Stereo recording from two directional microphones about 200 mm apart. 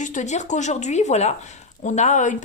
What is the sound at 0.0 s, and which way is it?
A woman's voice, 40° left (ahead or behind).